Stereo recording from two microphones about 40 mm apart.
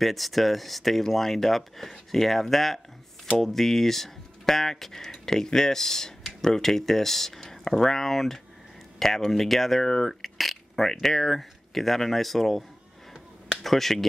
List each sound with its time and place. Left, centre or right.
0.0 s speech: centre
9.8 s speech: centre
10.2 s a sound: centre
10.9 s speech: centre